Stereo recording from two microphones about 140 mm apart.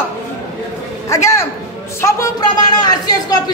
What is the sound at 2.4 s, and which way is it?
Speech, 30° left (ahead or behind).